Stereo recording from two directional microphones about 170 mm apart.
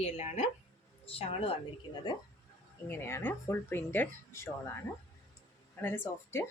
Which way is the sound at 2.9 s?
15° left (ahead or behind).